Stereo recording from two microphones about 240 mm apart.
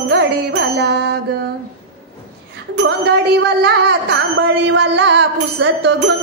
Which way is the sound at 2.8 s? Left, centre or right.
Right.